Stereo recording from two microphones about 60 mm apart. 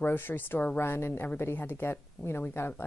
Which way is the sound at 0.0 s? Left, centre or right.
Left.